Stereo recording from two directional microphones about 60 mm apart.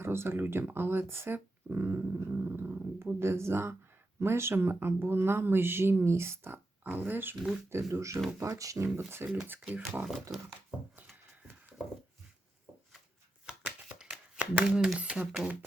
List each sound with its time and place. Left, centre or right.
0.0 s speech: right
7.7 s speech: right
8.4 s speech: right
9.0 s speech: right
13.6 s shuffling cards: right
14.0 s a sound: centre
14.9 s speech: right